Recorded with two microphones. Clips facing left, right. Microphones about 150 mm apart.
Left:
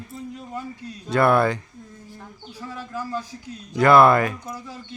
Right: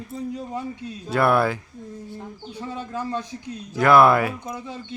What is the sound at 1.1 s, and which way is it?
Speech, 5° right (ahead or behind).